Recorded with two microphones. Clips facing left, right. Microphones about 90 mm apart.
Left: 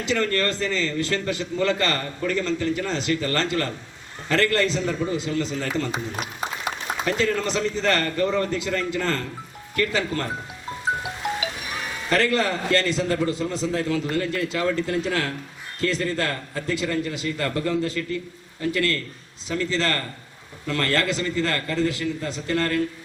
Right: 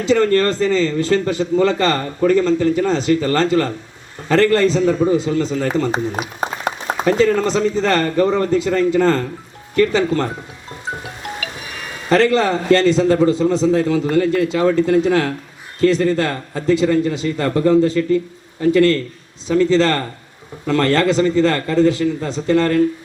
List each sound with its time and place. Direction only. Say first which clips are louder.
0.1 s a man's voice: right 9 dB; 25° right (ahead or behind)
6.1 s a sound: right 6 dB; 45° right (ahead or behind)
7.3 s a man's voice: right 8 dB; 20° right (ahead or behind)
11.0 s music: left 1 dB; 20° left (ahead or behind)
12.1 s a man's voice: right 8 dB; 25° right (ahead or behind)